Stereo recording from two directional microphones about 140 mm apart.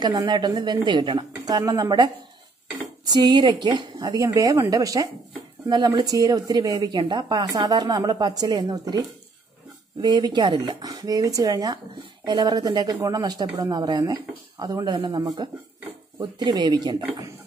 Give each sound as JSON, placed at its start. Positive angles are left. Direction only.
{"t": 0.0, "sound": "a woman's voice", "side_deg": -30}
{"t": 3.1, "sound": "speech", "side_deg": -30}
{"t": 10.0, "sound": "speech", "side_deg": -30}